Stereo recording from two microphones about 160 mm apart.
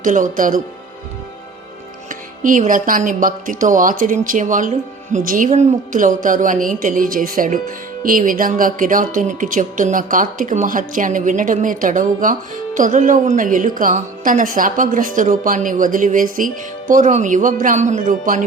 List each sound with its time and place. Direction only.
0.0 s a woman's voice: 55° right (ahead or behind)
2.0 s a woman's voice: 55° right (ahead or behind)